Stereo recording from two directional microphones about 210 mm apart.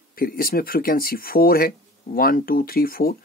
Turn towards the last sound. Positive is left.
turn(degrees=45)  # may be behind; listen again after turning